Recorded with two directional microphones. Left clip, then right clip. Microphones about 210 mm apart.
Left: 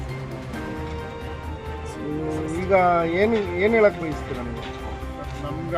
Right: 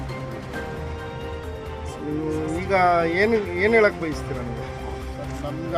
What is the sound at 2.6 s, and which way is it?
Speech, 45° left (ahead or behind).